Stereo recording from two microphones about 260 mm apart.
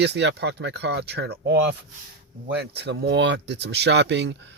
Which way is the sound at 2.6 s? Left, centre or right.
Right.